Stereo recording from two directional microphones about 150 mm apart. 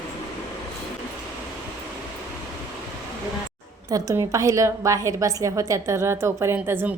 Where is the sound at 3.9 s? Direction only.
20° right (ahead or behind).